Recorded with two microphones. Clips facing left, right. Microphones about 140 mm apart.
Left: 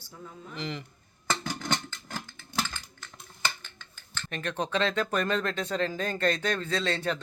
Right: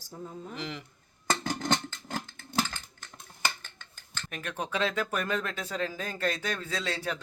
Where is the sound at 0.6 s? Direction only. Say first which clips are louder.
Left 4 dB; 10° right (ahead or behind).